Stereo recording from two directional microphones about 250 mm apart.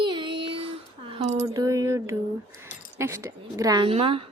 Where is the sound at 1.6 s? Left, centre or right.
Centre.